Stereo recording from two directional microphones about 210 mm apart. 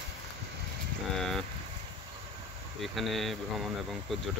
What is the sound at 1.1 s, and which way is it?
Speech, centre (ahead or behind).